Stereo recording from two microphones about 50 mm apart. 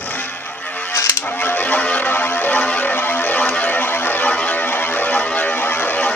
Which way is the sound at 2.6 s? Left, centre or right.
Left.